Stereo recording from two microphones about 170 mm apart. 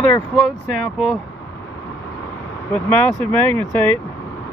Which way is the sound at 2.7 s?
10° left (ahead or behind).